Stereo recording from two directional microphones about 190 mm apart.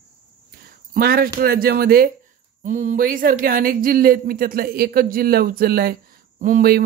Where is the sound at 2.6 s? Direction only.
40° right (ahead or behind).